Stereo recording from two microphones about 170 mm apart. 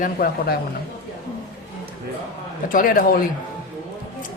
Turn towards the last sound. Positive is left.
turn(degrees=55)  # may be behind; listen again after turning